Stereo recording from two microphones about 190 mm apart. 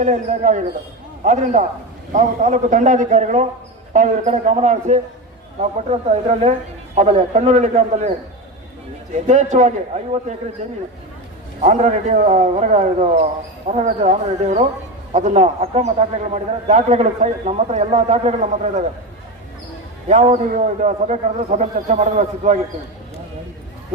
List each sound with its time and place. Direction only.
0.0 s a man's voice: 35° right (ahead or behind)
9.2 s a man's voice: 40° right (ahead or behind)
11.6 s a man's voice: 40° right (ahead or behind)
20.1 s a man's voice: 40° right (ahead or behind)